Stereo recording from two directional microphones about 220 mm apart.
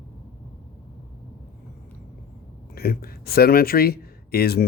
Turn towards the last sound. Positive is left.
turn(degrees=45)  # may be behind; listen again after turning